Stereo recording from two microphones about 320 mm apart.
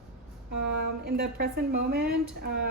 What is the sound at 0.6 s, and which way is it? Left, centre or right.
A woman's voice, right.